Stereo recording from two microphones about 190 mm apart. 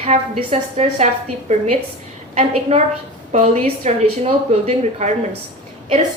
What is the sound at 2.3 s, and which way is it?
A woman's voice, 35° right (ahead or behind).